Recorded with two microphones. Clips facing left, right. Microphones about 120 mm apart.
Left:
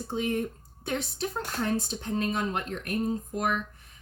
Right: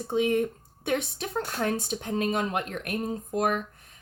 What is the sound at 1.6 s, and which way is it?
Speech, 60° right (ahead or behind).